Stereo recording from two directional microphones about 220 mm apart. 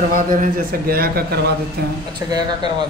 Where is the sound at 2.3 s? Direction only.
20° right (ahead or behind).